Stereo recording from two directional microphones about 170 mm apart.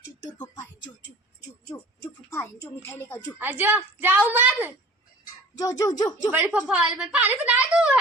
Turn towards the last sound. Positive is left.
turn(degrees=-5)  # may be behind; listen again after turning